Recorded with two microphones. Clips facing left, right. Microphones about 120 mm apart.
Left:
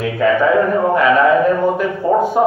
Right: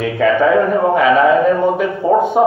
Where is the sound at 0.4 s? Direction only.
25° right (ahead or behind).